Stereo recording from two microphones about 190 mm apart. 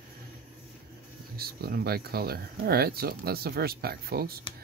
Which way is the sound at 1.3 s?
55° right (ahead or behind).